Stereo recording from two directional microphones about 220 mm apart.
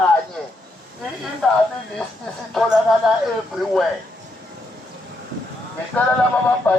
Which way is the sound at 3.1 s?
Centre (ahead or behind).